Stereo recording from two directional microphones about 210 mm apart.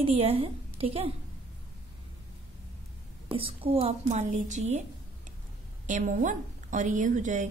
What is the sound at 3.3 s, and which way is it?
A woman's voice, 25° right (ahead or behind).